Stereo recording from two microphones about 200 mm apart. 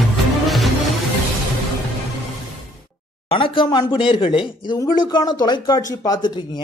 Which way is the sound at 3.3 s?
25° left (ahead or behind).